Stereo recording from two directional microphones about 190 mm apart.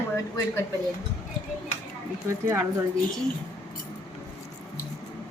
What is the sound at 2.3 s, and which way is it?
Speech, 15° right (ahead or behind).